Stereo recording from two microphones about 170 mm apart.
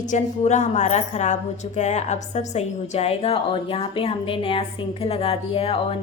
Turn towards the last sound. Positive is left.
turn(degrees=35)  # may be behind; listen again after turning